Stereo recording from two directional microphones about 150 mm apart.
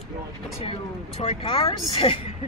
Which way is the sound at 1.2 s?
40° left (ahead or behind).